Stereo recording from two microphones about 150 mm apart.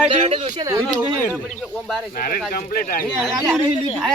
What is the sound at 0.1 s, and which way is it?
Speech, 40° right (ahead or behind).